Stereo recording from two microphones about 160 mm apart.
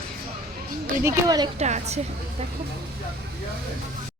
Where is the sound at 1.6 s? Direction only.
45° right (ahead or behind).